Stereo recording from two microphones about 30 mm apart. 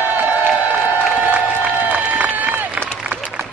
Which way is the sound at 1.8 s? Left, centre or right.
Right.